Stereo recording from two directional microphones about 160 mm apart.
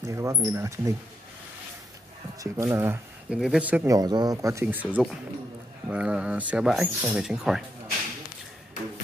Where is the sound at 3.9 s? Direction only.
25° right (ahead or behind); by 7.6 s 5° right (ahead or behind).